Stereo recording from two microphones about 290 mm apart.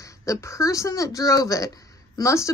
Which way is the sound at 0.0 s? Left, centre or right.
Centre.